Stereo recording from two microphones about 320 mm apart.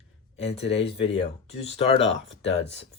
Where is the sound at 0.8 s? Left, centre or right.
Centre.